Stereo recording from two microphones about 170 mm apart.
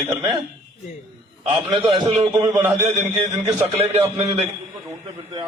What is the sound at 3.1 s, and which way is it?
A man's voice, 30° right (ahead or behind).